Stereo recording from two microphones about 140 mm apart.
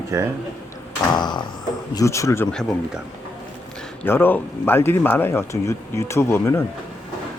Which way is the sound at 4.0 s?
15° left (ahead or behind).